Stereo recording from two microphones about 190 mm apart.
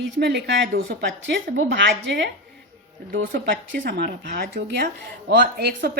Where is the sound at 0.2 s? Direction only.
60° right (ahead or behind).